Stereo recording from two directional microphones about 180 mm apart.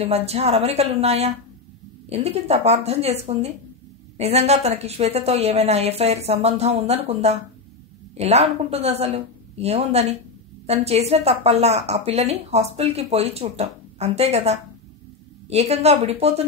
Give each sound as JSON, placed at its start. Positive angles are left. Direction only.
{"t": 0.0, "sound": "a woman's voice", "side_deg": -35}